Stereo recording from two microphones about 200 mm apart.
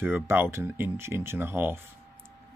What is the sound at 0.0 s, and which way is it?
Speech, 10° right (ahead or behind).